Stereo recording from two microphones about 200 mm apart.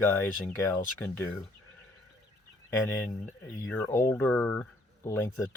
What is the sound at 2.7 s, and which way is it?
Speech, 15° left (ahead or behind).